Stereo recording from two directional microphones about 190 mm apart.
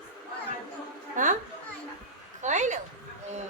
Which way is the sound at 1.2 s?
40° right (ahead or behind).